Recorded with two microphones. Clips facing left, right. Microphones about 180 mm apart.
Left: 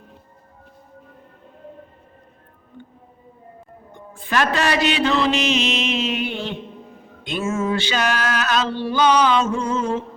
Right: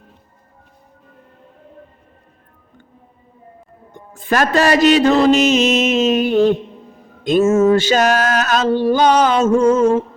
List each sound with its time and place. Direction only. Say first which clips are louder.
3.9 s mantra: right 4 dB; 45° right (ahead or behind)